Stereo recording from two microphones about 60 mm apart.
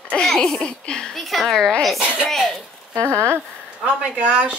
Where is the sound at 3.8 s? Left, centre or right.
Centre.